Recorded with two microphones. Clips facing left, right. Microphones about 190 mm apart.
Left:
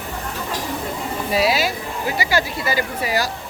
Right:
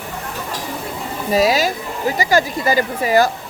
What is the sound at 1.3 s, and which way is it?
Speech, 40° right (ahead or behind).